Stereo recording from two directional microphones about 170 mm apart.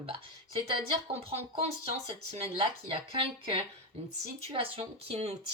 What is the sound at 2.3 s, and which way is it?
Speech, 35° right (ahead or behind).